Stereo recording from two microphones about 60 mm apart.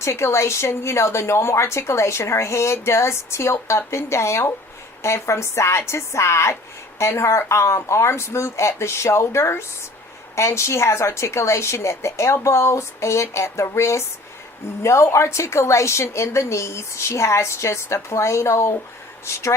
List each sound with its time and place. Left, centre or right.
0.0 s a woman's voice: left